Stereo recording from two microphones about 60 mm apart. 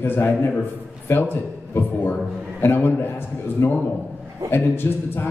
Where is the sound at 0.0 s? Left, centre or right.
Left.